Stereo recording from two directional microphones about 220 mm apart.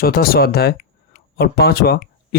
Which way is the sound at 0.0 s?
45° left (ahead or behind).